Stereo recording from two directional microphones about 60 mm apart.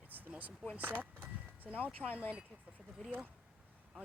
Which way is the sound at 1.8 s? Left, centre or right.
Left.